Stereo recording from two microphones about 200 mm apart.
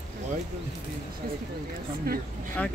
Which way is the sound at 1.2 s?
45° right (ahead or behind).